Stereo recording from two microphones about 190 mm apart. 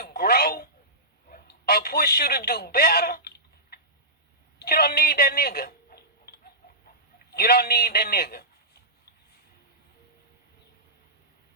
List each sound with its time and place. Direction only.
0.0 s telephone: 55° left (ahead or behind)
1.3 s a sound: 55° left (ahead or behind)
7.3 s a man's voice: 55° left (ahead or behind)